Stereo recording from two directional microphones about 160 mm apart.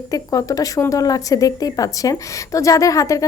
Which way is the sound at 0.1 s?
20° left (ahead or behind).